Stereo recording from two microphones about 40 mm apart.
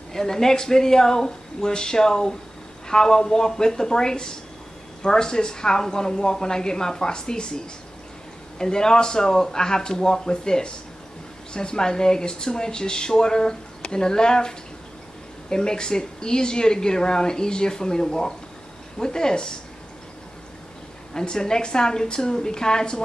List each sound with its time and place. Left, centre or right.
0.1 s speech: centre
15.5 s speech: centre
21.1 s speech: centre